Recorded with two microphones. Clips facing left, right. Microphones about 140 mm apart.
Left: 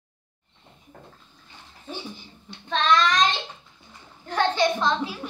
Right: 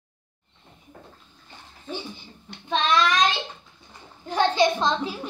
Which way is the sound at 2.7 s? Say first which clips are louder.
Left 1 dB; 10° right (ahead or behind).